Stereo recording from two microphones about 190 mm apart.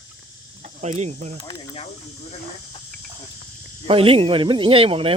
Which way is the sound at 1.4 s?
30° left (ahead or behind).